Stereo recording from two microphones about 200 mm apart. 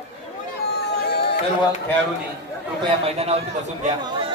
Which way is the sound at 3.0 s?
30° right (ahead or behind).